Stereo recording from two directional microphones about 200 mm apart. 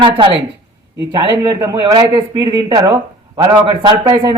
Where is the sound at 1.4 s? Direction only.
15° right (ahead or behind).